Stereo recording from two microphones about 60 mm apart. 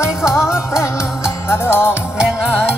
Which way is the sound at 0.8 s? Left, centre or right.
Left.